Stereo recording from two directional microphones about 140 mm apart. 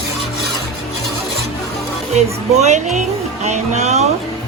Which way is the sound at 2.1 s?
55° right (ahead or behind).